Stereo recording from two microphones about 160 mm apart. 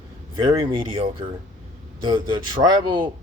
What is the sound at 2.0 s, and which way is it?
Speech, 30° right (ahead or behind).